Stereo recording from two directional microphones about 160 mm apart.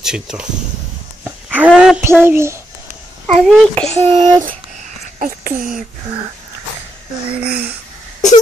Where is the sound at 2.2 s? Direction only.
15° right (ahead or behind).